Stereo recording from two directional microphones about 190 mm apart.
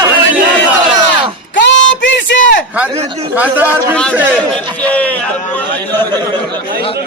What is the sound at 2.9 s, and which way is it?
Speech, 35° right (ahead or behind).